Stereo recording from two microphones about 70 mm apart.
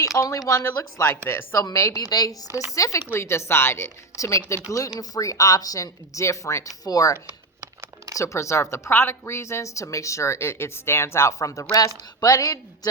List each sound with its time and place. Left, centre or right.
0.2 s a woman's voice: left
1.1 s speech: left
1.7 s a woman's voice: left
2.7 s a woman's voice: left
4.9 s a woman's voice: left
6.8 s a woman's voice: left
8.1 s a woman's voice: left